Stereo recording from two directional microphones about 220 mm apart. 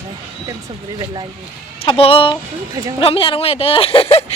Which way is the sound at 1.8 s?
25° left (ahead or behind).